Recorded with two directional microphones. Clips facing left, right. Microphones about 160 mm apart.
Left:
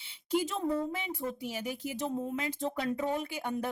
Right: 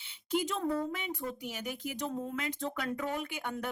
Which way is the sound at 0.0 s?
35° left (ahead or behind).